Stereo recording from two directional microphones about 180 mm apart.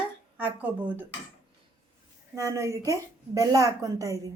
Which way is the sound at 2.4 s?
15° right (ahead or behind).